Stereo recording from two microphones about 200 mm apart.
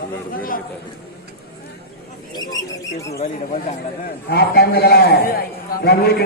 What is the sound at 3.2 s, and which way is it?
Speech, 35° left (ahead or behind).